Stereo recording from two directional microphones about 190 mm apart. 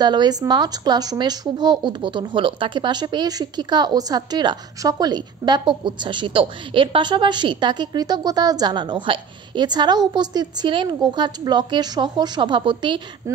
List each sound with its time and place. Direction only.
0.0 s speech: 20° right (ahead or behind)